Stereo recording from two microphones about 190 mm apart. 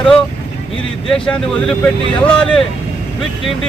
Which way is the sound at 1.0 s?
Centre (ahead or behind).